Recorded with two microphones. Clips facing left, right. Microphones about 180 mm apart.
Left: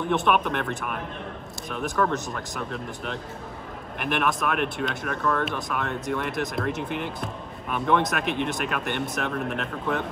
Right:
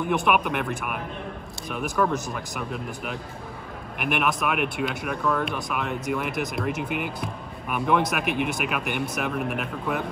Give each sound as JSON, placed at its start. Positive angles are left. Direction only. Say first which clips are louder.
{"t": 0.1, "sound": "speech", "louder": "even", "side_deg": 0}